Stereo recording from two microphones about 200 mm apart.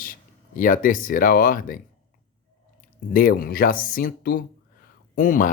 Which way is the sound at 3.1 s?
45° left (ahead or behind).